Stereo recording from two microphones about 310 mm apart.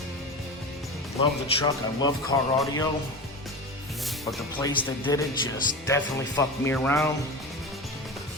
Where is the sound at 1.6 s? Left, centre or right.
Centre.